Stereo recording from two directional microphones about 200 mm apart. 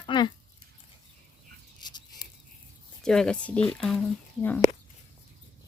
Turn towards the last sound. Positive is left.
turn(degrees=10)  # may be behind; listen again after turning